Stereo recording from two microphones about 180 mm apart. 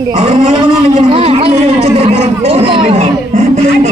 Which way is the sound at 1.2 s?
35° right (ahead or behind).